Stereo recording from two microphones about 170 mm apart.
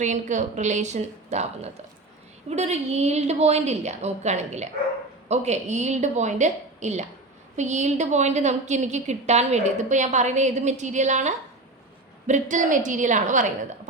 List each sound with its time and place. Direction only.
0.0 s a woman's voice: 45° right (ahead or behind)